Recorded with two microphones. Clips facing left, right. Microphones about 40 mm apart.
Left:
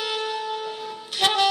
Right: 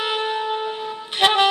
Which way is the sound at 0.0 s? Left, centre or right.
Right.